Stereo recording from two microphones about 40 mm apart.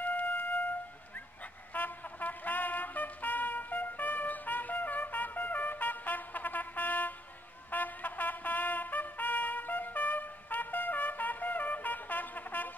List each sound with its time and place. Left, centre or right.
0.0 s music: left
1.7 s music: left
7.7 s trumpet: left